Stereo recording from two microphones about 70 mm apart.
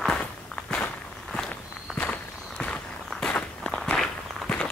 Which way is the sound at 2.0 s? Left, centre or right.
Centre.